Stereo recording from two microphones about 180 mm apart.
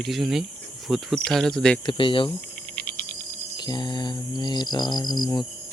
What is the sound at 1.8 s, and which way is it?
Mantra, 25° left (ahead or behind).